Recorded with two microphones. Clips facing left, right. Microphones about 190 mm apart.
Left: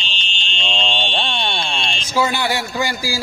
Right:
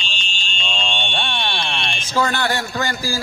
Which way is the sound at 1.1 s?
20° left (ahead or behind).